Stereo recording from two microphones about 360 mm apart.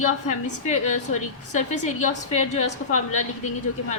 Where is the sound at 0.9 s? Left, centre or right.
Left.